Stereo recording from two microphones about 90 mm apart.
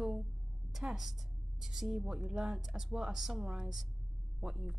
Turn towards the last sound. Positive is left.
turn(degrees=-5)  # may be behind; listen again after turning